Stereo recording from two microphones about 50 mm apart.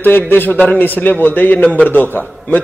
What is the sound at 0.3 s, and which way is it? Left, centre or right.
A man's voice, left.